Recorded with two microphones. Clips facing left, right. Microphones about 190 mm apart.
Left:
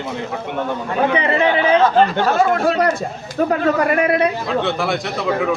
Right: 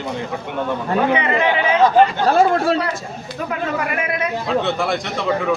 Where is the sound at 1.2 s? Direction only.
35° left (ahead or behind).